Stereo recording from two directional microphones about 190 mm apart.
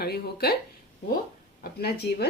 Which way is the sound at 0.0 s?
55° left (ahead or behind).